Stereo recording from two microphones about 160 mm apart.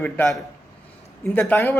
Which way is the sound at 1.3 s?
10° left (ahead or behind).